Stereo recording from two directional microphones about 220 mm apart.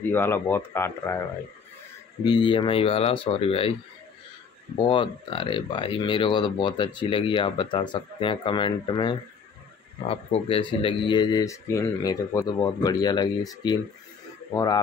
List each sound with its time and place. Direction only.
0.1 s speech: 10° left (ahead or behind)
2.2 s speech: 20° left (ahead or behind)
4.7 s speech: 25° left (ahead or behind)